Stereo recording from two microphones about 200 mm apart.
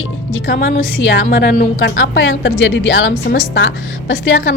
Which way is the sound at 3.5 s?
70° left (ahead or behind).